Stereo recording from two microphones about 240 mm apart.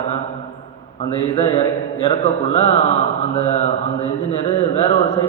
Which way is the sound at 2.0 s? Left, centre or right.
Left.